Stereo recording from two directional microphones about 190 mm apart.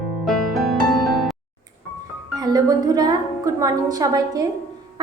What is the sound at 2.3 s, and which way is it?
A woman's voice, 20° right (ahead or behind).